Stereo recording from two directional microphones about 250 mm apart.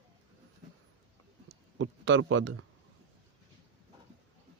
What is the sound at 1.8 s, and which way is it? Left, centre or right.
Speech, right.